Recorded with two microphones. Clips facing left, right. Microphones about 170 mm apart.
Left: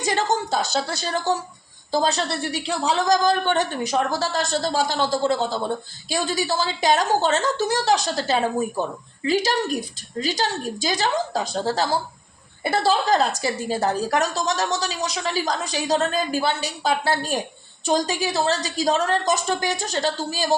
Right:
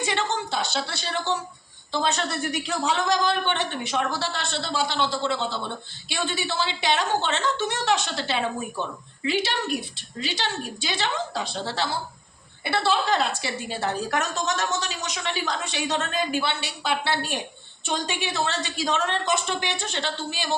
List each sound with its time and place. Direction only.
0.0 s a woman's voice: 40° left (ahead or behind)